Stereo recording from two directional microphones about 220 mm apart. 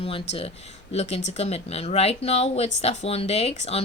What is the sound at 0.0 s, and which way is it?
Speech, 25° left (ahead or behind).